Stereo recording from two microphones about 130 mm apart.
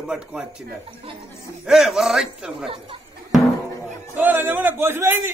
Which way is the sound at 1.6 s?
5° right (ahead or behind).